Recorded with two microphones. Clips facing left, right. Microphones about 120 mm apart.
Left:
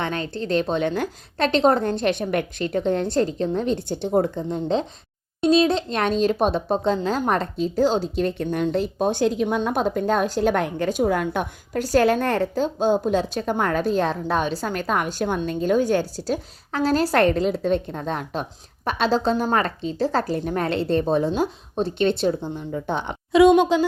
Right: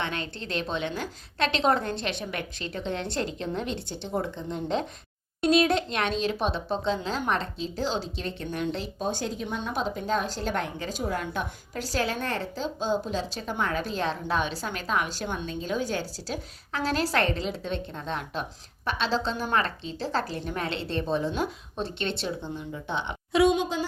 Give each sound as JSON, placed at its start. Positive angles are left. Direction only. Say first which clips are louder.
{"t": 0.0, "sound": "a woman's voice", "louder": "left 6 dB", "side_deg": 35}
{"t": 23.5, "sound": "a woman's voice", "louder": "left 9 dB", "side_deg": 75}